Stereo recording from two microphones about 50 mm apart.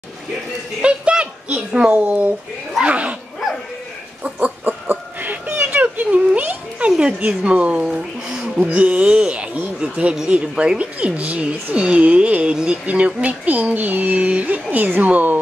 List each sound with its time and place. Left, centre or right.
0.8 s a child's voice: right
4.2 s a sound: right
6.9 s speech: centre
8.5 s speech: right